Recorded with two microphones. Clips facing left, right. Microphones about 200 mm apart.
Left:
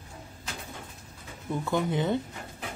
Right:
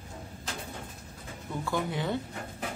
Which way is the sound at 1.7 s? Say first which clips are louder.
Left 4 dB; 20° left (ahead or behind).